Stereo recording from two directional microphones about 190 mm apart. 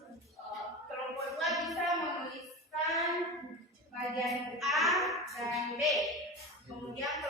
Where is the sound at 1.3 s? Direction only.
Centre (ahead or behind).